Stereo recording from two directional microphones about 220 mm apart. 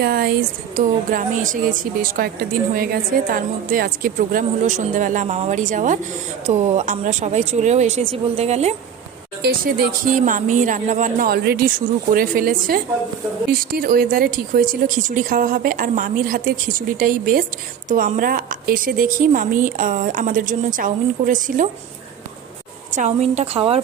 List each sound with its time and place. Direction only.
0.0 s speech: 45° right (ahead or behind)
9.4 s speech: 40° right (ahead or behind)
22.9 s a woman's voice: 35° right (ahead or behind)